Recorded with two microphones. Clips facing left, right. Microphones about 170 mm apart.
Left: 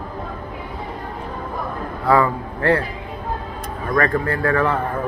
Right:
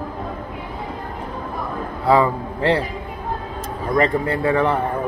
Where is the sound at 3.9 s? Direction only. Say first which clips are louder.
Right 1 dB; 20° right (ahead or behind).